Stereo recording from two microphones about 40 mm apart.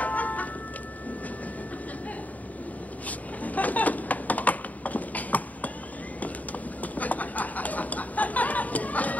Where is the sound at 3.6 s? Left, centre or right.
Left.